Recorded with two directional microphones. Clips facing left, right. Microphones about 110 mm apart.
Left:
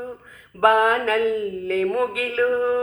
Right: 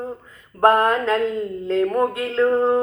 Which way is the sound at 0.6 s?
5° left (ahead or behind).